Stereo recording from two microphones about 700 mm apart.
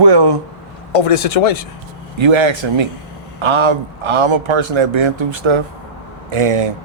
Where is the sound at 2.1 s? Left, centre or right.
Right.